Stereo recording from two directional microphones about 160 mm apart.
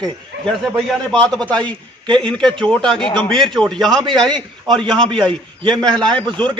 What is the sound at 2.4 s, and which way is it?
Speech, 30° right (ahead or behind).